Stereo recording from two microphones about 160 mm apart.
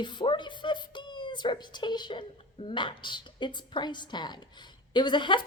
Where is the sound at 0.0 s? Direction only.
30° left (ahead or behind).